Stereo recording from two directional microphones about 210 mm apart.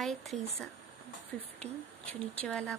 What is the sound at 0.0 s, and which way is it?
Speech, centre (ahead or behind).